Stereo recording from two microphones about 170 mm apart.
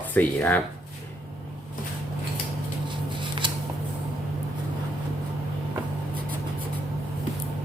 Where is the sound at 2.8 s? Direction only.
30° right (ahead or behind).